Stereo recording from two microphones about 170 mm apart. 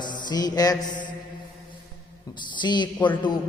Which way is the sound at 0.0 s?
25° left (ahead or behind).